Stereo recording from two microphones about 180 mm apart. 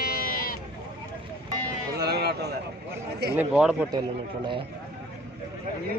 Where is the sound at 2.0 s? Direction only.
65° right (ahead or behind).